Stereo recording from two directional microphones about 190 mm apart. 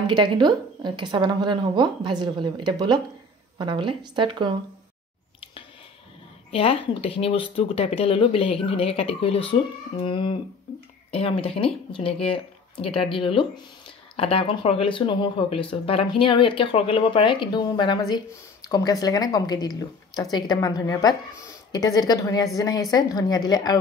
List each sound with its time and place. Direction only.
0.0 s a woman's voice: 25° right (ahead or behind)
6.5 s speech: 30° left (ahead or behind)